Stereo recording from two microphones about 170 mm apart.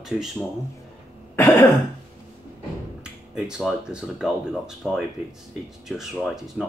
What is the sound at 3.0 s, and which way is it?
Speech, 5° right (ahead or behind).